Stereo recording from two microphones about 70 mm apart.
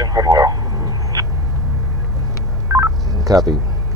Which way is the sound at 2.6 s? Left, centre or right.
Right.